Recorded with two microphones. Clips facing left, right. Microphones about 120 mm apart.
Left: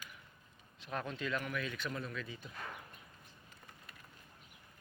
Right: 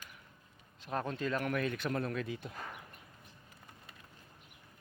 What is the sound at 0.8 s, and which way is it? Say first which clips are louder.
Speech: right 4 dB; 40° right (ahead or behind).